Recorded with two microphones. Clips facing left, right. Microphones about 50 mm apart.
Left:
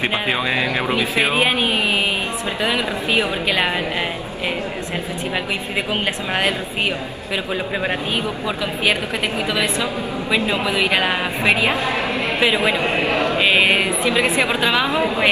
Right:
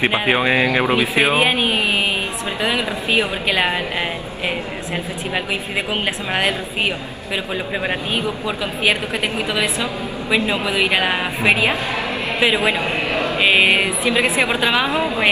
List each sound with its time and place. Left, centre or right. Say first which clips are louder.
0.3 s a woman's voice: right 6 dB; right; by 3.7 s centre
7.8 s a woman's voice: even; centre
12.8 s a sound: left 2 dB; left
13.4 s a woman's voice: right 2 dB; centre